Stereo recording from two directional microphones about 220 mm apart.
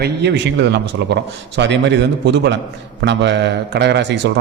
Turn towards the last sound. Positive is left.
turn(degrees=-55)  # may be behind; listen again after turning